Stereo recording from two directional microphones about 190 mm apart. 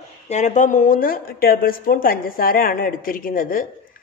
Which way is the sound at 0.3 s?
40° left (ahead or behind).